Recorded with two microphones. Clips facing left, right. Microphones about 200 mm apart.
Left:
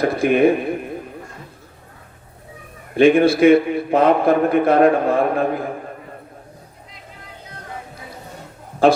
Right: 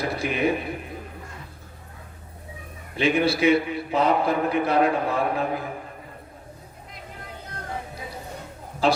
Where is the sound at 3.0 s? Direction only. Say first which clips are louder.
Left 9 dB; 50° left (ahead or behind).